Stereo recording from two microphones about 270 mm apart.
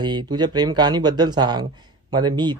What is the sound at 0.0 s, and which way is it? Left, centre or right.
Speech, centre.